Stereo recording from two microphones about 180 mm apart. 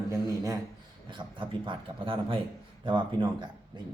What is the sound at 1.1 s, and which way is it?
A man's voice, 25° right (ahead or behind).